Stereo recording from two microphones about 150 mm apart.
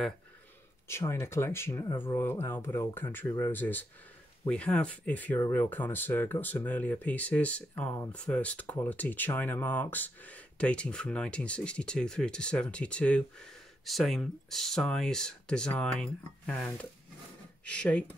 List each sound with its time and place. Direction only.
0.8 s speech: 15° left (ahead or behind)